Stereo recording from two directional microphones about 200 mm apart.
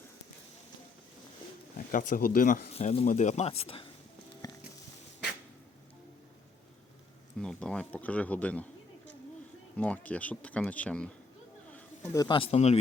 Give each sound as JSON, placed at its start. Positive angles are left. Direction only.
{"t": 1.9, "sound": "speech", "side_deg": 40}
{"t": 7.3, "sound": "speech", "side_deg": 5}
{"t": 9.7, "sound": "speech", "side_deg": 5}
{"t": 11.7, "sound": "speech", "side_deg": 15}